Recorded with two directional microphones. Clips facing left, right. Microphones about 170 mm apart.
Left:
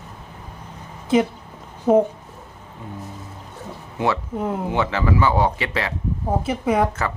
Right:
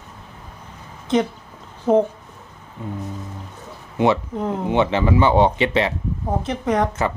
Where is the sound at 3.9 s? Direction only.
20° right (ahead or behind).